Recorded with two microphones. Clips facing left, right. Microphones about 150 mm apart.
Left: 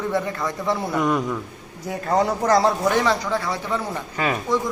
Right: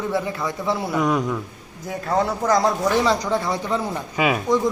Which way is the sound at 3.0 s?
15° right (ahead or behind).